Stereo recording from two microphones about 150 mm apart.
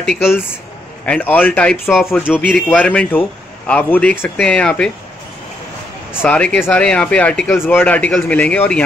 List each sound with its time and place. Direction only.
0.0 s speech: 5° left (ahead or behind)
2.2 s speech: 5° right (ahead or behind)
2.5 s speech: 10° left (ahead or behind)
6.2 s speech: 10° left (ahead or behind)